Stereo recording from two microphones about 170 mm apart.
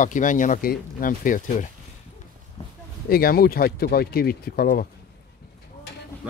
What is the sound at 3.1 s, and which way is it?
Speech, 60° left (ahead or behind).